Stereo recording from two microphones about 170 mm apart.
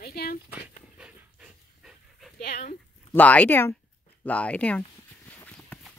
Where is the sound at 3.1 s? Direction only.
10° left (ahead or behind).